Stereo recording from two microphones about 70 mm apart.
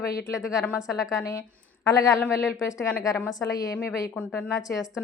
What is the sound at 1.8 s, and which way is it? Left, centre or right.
A woman's voice, left.